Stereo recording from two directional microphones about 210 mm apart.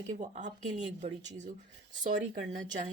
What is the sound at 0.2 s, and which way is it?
Speech, 35° right (ahead or behind).